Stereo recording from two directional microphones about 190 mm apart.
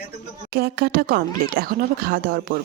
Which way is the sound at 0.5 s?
55° right (ahead or behind).